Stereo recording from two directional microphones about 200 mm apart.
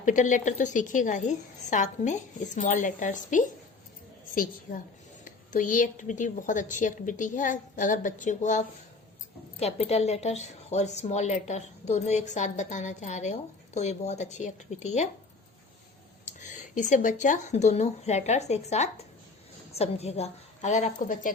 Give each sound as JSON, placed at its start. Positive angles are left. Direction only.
{"t": 0.0, "sound": "a woman's voice", "side_deg": 40}
{"t": 5.2, "sound": "a woman's voice", "side_deg": 40}
{"t": 16.2, "sound": "a woman's voice", "side_deg": 40}